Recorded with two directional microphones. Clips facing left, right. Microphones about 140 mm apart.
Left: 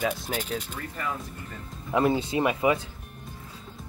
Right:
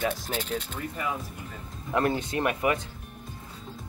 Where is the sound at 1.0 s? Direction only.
10° right (ahead or behind).